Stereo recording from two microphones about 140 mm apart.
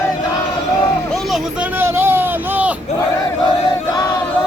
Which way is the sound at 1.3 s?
10° right (ahead or behind).